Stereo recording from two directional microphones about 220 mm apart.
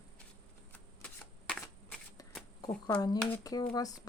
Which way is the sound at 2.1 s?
5° left (ahead or behind).